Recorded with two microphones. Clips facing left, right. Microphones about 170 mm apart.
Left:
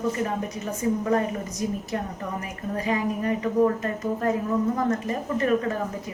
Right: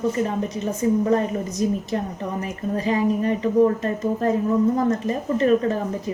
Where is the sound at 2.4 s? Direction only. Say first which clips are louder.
Right 6 dB; 30° right (ahead or behind).